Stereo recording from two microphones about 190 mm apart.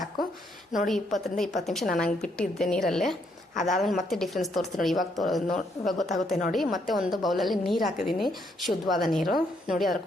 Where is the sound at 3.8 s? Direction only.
Centre (ahead or behind).